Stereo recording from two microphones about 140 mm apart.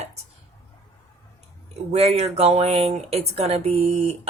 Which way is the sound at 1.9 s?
50° right (ahead or behind).